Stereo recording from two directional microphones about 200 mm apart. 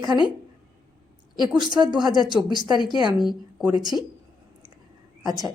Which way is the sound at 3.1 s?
Centre (ahead or behind).